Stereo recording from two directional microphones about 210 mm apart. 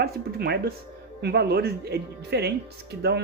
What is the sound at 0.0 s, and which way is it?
Speech, 50° right (ahead or behind).